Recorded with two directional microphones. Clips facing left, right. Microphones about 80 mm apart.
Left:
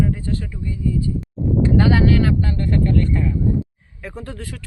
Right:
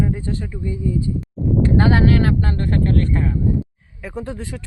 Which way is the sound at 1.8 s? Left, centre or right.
Right.